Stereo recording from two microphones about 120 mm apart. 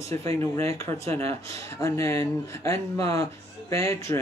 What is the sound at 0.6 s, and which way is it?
Speech, 20° left (ahead or behind).